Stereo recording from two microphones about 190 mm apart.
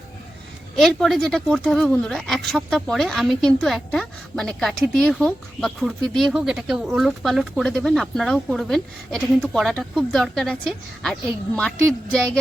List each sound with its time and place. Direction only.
0.8 s speech: centre (ahead or behind)